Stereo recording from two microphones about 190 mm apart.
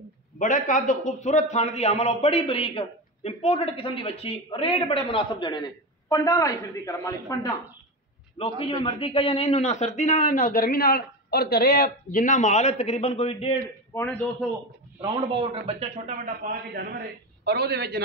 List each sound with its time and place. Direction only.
0.4 s a man's voice: 45° left (ahead or behind); by 7.5 s 15° left (ahead or behind)
8.4 s a man's voice: 30° left (ahead or behind)
13.9 s a man's voice: 5° left (ahead or behind)
15.0 s a man's voice: 25° right (ahead or behind)
17.5 s a man's voice: 55° right (ahead or behind)